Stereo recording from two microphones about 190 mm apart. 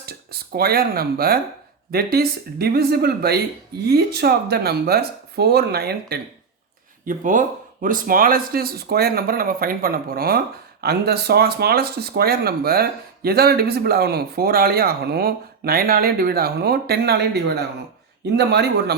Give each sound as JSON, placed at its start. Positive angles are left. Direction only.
{"t": 0.0, "sound": "speech", "side_deg": -55}
{"t": 7.0, "sound": "speech", "side_deg": -45}